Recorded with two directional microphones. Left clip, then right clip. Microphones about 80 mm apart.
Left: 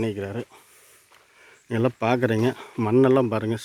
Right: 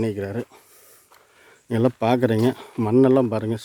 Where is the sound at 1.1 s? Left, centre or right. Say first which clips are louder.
Even; right.